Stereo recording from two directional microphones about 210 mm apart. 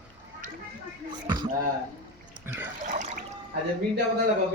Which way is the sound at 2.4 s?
10° right (ahead or behind).